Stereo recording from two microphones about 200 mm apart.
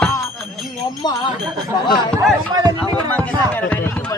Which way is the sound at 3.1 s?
10° left (ahead or behind).